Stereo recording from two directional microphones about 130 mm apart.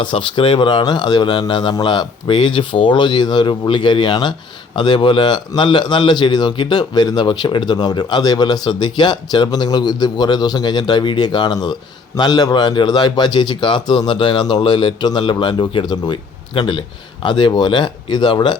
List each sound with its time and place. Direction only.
0.0 s speech: 40° left (ahead or behind)